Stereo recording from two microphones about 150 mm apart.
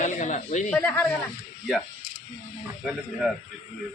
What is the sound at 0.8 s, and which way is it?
Speech, 10° left (ahead or behind).